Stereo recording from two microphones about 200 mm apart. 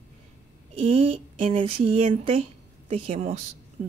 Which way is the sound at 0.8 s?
30° right (ahead or behind).